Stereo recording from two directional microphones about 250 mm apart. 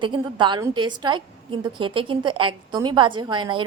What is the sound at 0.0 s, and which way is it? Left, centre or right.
A woman's voice, centre.